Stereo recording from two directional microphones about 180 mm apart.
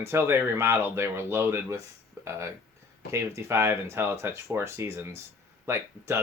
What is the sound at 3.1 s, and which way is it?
Speech, 15° right (ahead or behind).